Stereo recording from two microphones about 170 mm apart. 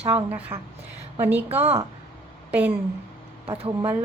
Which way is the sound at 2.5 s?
10° right (ahead or behind).